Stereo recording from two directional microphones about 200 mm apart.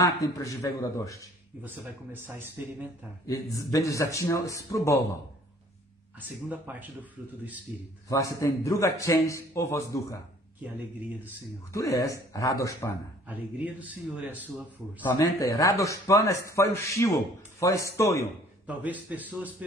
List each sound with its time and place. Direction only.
0.0 s speech: 15° left (ahead or behind)
2.1 s speech: 10° right (ahead or behind)
3.3 s speech: 15° left (ahead or behind)
6.1 s speech: 10° right (ahead or behind)
8.1 s speech: 15° left (ahead or behind)
11.7 s speech: 15° left (ahead or behind)
13.3 s speech: 10° right (ahead or behind)
15.0 s speech: 15° left (ahead or behind)
18.8 s speech: 10° right (ahead or behind)